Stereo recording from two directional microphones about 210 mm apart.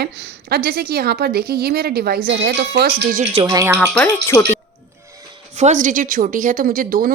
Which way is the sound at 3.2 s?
30° right (ahead or behind).